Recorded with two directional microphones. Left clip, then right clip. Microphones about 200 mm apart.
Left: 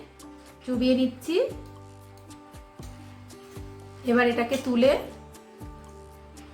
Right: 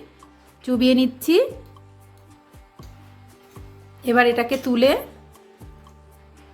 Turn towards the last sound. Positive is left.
turn(degrees=-60)  # may be behind; listen again after turning